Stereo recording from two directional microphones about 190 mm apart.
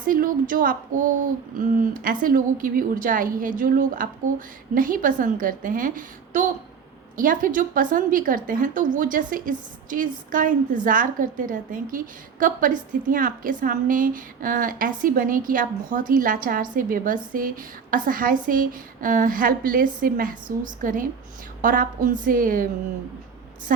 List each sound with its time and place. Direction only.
0.1 s a woman's voice: 45° right (ahead or behind)